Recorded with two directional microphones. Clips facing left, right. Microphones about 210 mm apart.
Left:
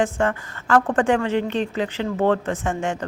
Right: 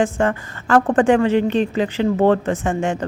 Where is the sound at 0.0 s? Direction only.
20° right (ahead or behind).